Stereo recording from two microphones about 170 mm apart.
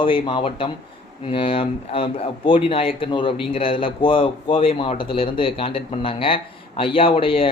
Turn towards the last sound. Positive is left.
turn(degrees=30)  # may be behind; listen again after turning